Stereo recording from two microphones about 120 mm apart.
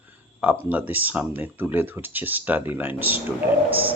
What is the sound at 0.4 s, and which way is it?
A man's voice, 10° right (ahead or behind).